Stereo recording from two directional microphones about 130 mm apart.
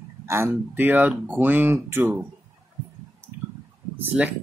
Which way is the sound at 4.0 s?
10° right (ahead or behind).